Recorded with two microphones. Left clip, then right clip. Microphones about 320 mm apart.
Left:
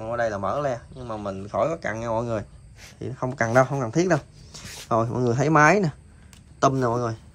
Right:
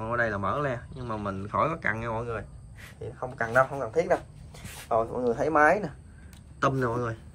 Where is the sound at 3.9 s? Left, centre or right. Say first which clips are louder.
Left 3 dB; left.